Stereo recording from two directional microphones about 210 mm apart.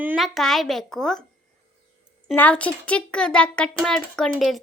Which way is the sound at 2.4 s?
5° left (ahead or behind).